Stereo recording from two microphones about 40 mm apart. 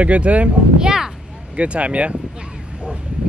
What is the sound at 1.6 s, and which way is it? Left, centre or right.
Speech, right.